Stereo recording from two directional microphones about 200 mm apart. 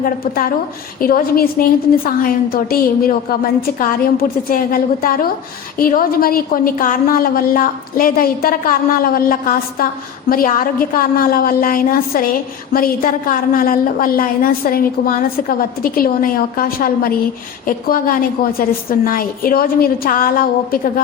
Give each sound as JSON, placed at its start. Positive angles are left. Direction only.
{"t": 0.0, "sound": "a woman's voice", "side_deg": 45}